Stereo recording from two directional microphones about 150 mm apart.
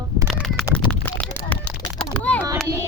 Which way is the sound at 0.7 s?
5° left (ahead or behind).